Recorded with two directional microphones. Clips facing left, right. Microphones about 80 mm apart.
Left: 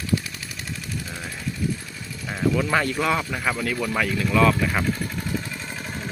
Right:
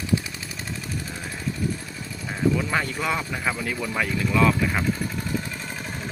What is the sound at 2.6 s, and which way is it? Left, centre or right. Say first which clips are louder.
Speech: left 3 dB; centre.